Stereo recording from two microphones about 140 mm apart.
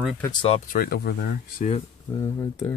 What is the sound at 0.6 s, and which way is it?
Speech, 90° left.